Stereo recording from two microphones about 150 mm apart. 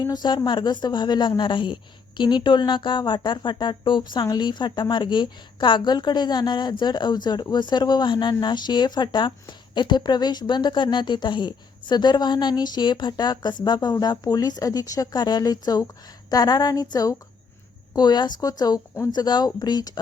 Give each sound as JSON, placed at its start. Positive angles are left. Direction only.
{"t": 0.0, "sound": "a woman's voice", "side_deg": 30}